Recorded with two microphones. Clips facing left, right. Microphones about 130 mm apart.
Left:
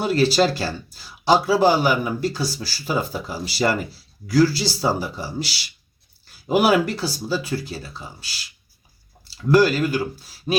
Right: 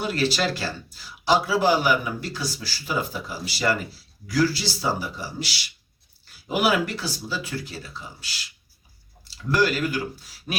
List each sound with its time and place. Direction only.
0.0 s speech: 35° left (ahead or behind)
6.5 s speech: 40° left (ahead or behind)
9.5 s speech: 40° left (ahead or behind)